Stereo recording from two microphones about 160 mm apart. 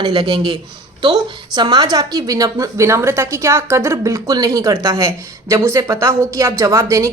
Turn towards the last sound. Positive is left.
turn(degrees=-20)  # may be behind; listen again after turning